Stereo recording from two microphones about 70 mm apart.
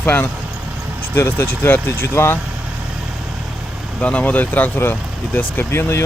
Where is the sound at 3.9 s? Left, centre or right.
Centre.